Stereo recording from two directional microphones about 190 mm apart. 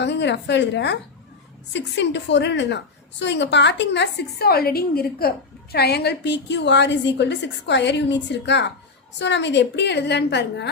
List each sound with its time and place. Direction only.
0.0 s a woman's voice: 65° left (ahead or behind)